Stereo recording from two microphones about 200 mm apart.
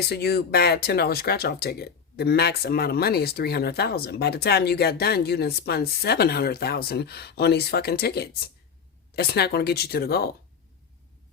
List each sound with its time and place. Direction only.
0.1 s speech: 50° left (ahead or behind)